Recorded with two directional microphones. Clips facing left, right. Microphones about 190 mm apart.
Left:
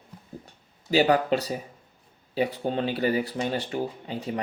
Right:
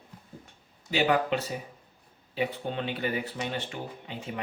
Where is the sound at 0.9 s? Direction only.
35° left (ahead or behind).